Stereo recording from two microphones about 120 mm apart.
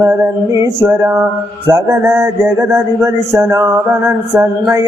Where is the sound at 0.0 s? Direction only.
25° right (ahead or behind).